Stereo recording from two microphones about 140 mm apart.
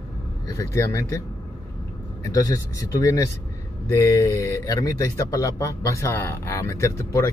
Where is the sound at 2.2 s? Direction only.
25° left (ahead or behind).